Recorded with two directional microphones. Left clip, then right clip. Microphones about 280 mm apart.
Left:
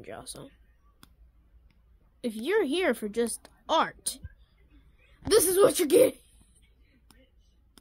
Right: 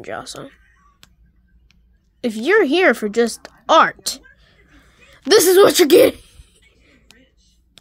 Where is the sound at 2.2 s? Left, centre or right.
Centre.